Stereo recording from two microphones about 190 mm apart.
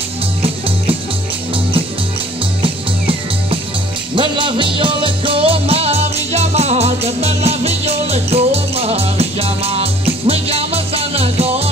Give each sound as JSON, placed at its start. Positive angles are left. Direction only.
{"t": 2.6, "sound": "music", "side_deg": -30}